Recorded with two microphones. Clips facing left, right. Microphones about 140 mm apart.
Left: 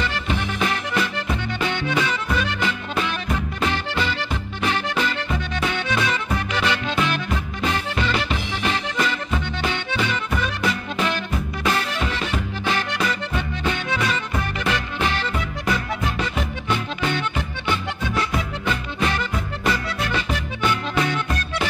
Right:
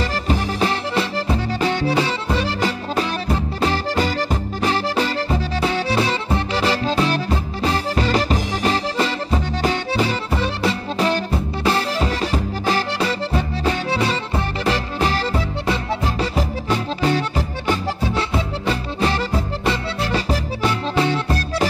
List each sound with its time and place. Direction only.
0.0 s music: 35° right (ahead or behind)